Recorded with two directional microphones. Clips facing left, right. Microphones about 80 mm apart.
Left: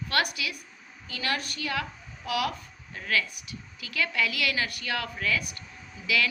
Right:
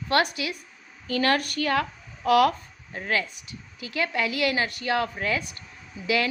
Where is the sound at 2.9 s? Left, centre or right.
Right.